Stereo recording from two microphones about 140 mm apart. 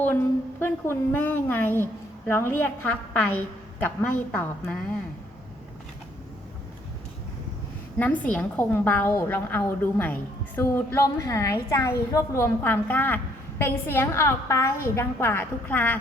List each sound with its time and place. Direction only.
0.0 s a woman's voice: 15° left (ahead or behind)
7.9 s a woman's voice: 10° left (ahead or behind)